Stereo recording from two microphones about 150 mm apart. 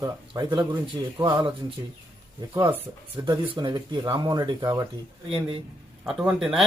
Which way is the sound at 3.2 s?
30° right (ahead or behind).